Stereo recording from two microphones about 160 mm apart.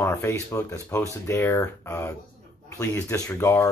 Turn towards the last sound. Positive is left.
turn(degrees=15)  # may be behind; listen again after turning